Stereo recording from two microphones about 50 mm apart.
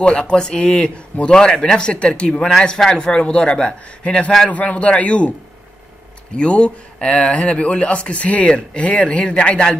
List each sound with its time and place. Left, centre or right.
0.0 s a man's voice: left
6.3 s speech: left